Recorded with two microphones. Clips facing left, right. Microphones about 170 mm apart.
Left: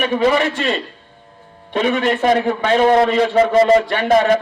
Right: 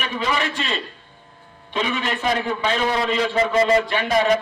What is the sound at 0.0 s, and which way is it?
Speech, 55° left (ahead or behind).